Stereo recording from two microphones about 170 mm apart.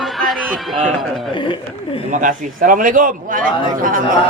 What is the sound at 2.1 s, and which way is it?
Speech, 50° right (ahead or behind).